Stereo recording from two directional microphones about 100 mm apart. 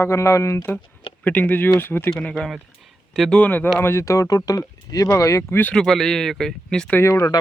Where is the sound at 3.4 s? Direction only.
20° left (ahead or behind).